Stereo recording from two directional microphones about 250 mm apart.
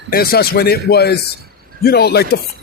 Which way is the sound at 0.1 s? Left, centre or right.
Left.